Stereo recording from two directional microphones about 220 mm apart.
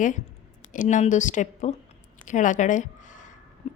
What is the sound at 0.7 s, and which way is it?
A woman's voice, 35° left (ahead or behind).